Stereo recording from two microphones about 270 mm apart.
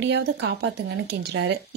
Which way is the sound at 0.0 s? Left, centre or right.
Right.